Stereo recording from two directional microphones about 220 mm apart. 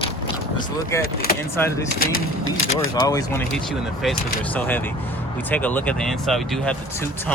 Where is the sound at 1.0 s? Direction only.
45° left (ahead or behind).